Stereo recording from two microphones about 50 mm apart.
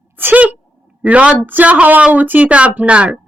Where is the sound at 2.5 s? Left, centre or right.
Right.